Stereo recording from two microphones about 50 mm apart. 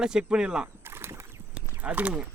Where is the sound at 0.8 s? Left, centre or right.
Right.